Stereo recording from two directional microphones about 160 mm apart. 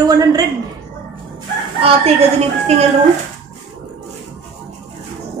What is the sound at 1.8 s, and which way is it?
Speech, 35° right (ahead or behind).